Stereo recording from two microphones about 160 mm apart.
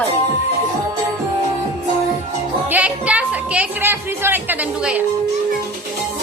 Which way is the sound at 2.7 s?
10° right (ahead or behind).